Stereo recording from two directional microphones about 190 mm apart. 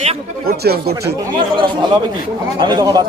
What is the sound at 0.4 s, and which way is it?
Speech, 55° right (ahead or behind).